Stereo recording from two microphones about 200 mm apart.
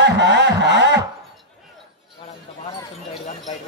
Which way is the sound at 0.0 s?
60° right (ahead or behind).